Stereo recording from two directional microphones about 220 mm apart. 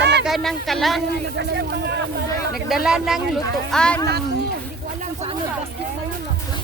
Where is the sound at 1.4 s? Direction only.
50° right (ahead or behind).